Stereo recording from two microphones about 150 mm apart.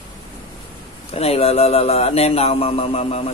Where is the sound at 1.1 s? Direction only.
40° left (ahead or behind).